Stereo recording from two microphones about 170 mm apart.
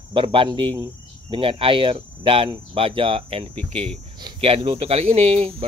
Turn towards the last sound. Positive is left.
turn(degrees=-35)  # may be behind; listen again after turning